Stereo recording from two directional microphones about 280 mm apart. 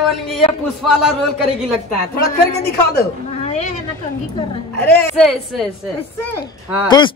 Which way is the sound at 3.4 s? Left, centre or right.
Left.